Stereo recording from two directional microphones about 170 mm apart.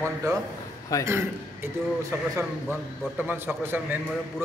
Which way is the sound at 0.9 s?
20° left (ahead or behind).